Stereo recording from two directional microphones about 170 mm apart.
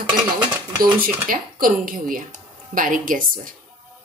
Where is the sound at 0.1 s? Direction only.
60° right (ahead or behind).